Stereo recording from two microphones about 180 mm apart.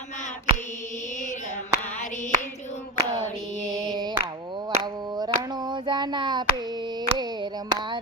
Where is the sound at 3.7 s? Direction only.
25° right (ahead or behind).